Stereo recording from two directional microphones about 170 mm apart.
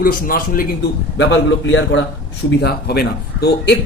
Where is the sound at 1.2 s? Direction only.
90° left.